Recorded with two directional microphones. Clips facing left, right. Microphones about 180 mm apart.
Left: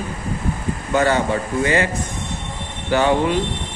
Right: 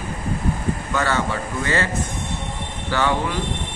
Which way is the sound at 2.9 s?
20° left (ahead or behind).